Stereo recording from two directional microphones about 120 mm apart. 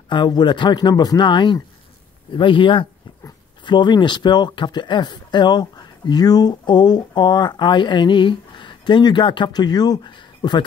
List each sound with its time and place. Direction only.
0.1 s speech: 40° left (ahead or behind)